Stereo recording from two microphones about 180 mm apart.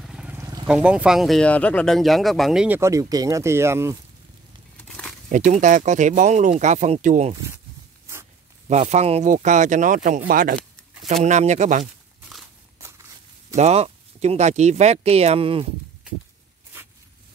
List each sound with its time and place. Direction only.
0.0 s a sound: 5° right (ahead or behind)
0.7 s speech: 5° right (ahead or behind)
2.8 s speech: 20° right (ahead or behind)
5.3 s speech: 45° right (ahead or behind)
8.6 s speech: 40° right (ahead or behind)
11.8 s a sound: centre (ahead or behind)
13.6 s speech: 35° right (ahead or behind)